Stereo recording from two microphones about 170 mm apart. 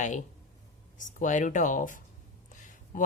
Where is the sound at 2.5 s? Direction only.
50° left (ahead or behind).